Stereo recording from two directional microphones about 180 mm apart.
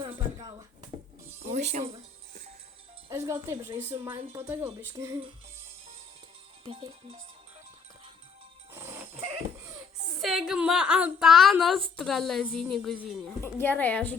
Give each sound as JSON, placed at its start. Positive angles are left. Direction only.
{"t": 0.3, "sound": "a sound", "side_deg": -25}
{"t": 1.5, "sound": "speech", "side_deg": -40}
{"t": 3.1, "sound": "a woman's voice", "side_deg": -15}
{"t": 6.7, "sound": "music", "side_deg": -30}
{"t": 8.7, "sound": "music", "side_deg": -15}
{"t": 10.2, "sound": "a woman's voice", "side_deg": 0}